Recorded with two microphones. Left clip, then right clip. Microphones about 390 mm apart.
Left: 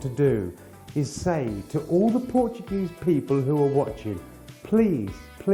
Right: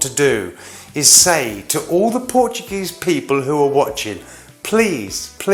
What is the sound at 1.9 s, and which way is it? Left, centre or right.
A man's voice, centre.